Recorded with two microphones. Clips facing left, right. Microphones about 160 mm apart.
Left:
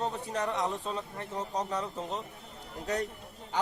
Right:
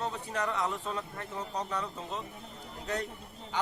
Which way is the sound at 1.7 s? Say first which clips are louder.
Left 2 dB; 40° left (ahead or behind).